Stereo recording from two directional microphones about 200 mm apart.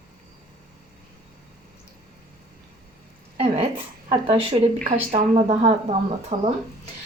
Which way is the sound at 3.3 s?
30° right (ahead or behind).